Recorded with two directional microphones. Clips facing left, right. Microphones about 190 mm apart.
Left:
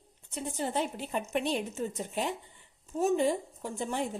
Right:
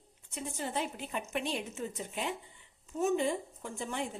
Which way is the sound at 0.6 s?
30° left (ahead or behind).